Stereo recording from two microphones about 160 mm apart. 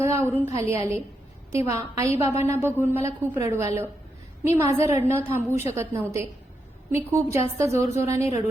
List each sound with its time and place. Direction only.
0.0 s a woman's voice: 15° right (ahead or behind)